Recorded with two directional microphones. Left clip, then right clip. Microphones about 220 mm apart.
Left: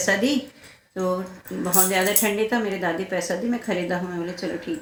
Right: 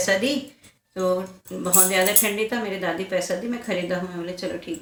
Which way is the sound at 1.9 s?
5° right (ahead or behind).